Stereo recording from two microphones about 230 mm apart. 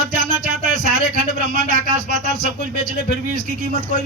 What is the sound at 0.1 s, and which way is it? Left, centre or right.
Music, right.